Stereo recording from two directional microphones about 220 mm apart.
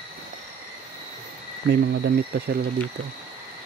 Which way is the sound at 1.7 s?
50° right (ahead or behind).